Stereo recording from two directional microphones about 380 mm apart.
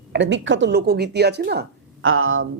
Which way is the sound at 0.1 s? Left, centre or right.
Right.